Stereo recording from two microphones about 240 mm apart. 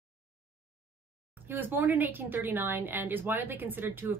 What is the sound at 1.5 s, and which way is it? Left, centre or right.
A woman's voice, centre.